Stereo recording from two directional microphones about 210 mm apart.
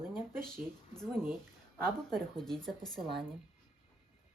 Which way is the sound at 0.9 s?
Centre (ahead or behind).